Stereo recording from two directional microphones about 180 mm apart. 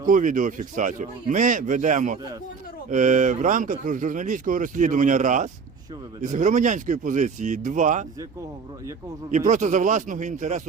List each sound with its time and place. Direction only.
0.0 s speech: 45° right (ahead or behind)
9.3 s speech: 45° right (ahead or behind)